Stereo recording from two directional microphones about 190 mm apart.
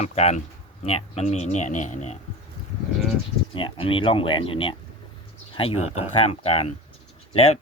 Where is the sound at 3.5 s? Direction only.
25° left (ahead or behind).